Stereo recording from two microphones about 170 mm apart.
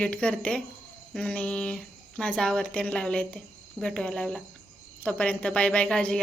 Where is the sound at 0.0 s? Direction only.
5° left (ahead or behind).